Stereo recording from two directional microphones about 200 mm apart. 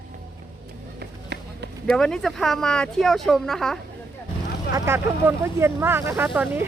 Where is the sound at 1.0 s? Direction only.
55° right (ahead or behind).